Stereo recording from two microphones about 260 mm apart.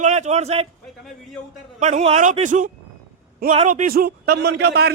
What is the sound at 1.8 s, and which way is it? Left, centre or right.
A man's voice, right.